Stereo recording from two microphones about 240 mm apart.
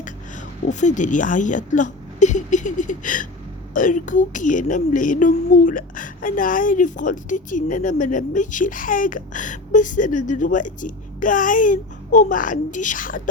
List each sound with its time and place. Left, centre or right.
0.0 s speech: left